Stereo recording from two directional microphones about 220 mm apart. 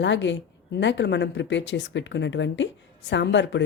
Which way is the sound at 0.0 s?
55° left (ahead or behind).